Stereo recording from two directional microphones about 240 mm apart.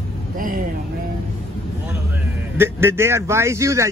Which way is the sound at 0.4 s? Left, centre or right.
Right.